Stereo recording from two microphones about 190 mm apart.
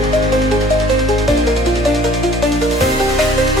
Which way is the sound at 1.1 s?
Centre (ahead or behind).